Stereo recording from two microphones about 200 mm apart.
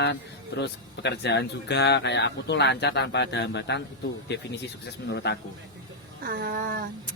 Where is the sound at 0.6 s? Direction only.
55° left (ahead or behind).